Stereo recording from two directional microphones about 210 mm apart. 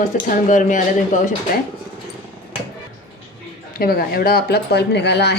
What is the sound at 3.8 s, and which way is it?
Speech, 45° left (ahead or behind).